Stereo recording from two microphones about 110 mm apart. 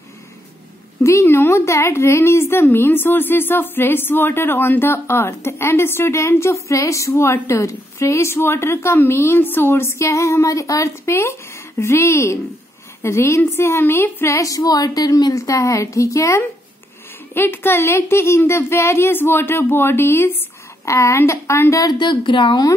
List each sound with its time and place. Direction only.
1.0 s a woman's voice: 25° left (ahead or behind)
21.9 s a woman's voice: 45° left (ahead or behind)